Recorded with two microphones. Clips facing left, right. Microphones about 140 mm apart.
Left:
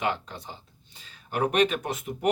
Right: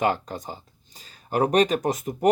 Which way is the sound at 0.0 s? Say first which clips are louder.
Right 5 dB; 45° right (ahead or behind).